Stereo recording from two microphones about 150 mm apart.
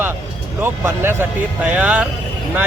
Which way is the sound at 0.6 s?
15° right (ahead or behind).